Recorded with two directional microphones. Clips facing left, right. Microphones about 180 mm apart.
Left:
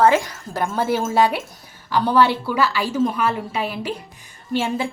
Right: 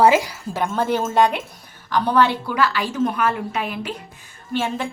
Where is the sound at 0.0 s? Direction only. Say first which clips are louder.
Right 1 dB; 10° right (ahead or behind).